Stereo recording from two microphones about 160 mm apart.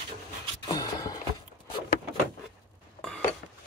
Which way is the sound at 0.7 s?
25° left (ahead or behind).